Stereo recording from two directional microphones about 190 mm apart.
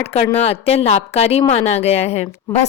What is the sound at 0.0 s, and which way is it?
A woman's voice, 35° left (ahead or behind).